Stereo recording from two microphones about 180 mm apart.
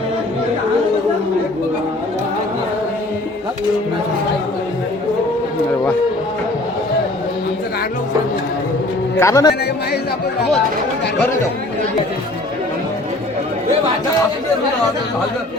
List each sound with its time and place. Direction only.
9.1 s a man's voice: 15° left (ahead or behind)